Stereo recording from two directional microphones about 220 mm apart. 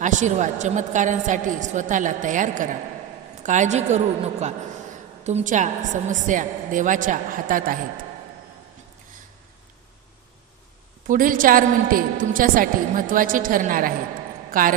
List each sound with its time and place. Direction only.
0.0 s a woman's voice: 35° right (ahead or behind)
11.1 s a woman's voice: 40° right (ahead or behind)